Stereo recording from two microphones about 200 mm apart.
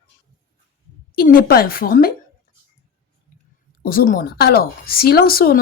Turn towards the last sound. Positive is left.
turn(degrees=50)  # may be behind; listen again after turning